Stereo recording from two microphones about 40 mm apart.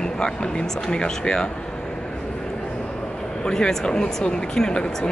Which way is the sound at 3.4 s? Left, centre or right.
Centre.